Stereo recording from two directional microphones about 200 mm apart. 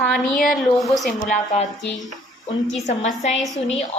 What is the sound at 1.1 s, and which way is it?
Speech, 40° left (ahead or behind).